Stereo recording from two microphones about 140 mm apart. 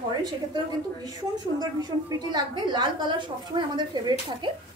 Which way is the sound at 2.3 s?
30° right (ahead or behind).